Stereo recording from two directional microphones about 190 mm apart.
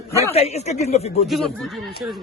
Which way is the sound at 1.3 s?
Centre (ahead or behind).